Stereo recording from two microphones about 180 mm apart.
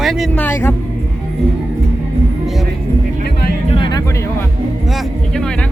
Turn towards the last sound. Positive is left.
turn(degrees=25)  # may be behind; listen again after turning